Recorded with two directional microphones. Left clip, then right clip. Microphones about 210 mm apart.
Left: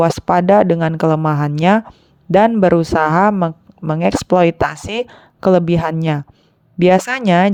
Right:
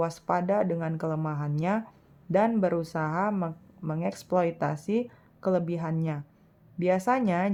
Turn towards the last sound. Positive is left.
turn(degrees=40)  # may be behind; listen again after turning